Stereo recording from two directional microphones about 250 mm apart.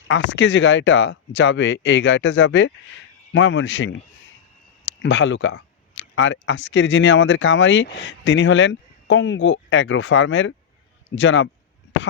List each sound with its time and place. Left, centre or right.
0.1 s speech: left